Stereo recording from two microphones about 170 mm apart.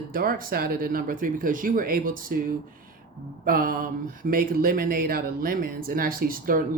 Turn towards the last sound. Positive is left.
turn(degrees=-55)  # may be behind; listen again after turning